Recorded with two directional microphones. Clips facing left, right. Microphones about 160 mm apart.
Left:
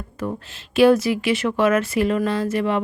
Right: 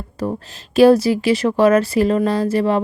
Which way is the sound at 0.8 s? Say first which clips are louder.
Right 4 dB; 35° right (ahead or behind).